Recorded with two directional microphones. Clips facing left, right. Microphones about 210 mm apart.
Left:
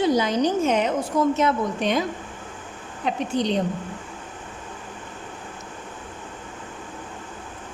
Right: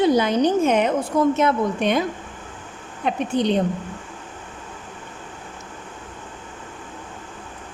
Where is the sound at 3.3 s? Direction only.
55° right (ahead or behind).